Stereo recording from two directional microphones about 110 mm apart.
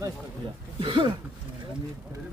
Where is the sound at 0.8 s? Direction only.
45° right (ahead or behind).